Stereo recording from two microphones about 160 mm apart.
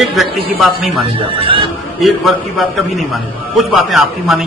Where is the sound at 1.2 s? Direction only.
35° right (ahead or behind).